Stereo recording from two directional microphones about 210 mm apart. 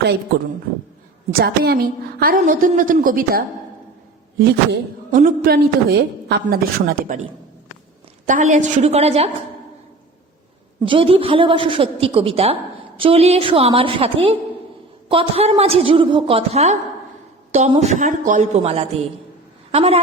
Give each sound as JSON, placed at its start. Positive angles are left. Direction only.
{"t": 1.3, "sound": "a man's voice", "side_deg": -45}
{"t": 8.3, "sound": "a woman's voice", "side_deg": -35}
{"t": 10.8, "sound": "a woman's voice", "side_deg": -25}